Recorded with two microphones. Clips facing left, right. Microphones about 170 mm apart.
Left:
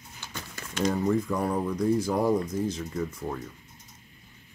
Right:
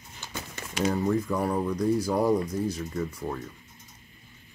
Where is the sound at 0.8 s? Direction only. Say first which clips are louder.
Even; 5° right (ahead or behind).